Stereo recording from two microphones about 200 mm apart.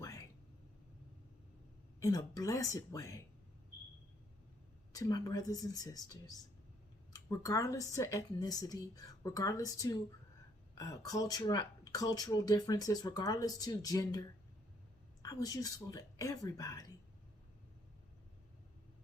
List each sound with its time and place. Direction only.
2.0 s a woman's voice: 15° left (ahead or behind)
4.9 s a woman's voice: 20° left (ahead or behind)